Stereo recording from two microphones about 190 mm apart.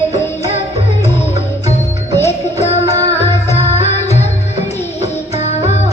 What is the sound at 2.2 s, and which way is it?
Music, 35° left (ahead or behind).